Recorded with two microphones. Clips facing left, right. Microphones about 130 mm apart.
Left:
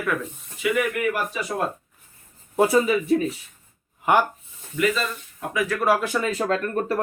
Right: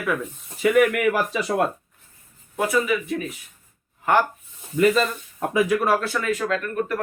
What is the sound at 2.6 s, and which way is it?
Speech, 30° left (ahead or behind).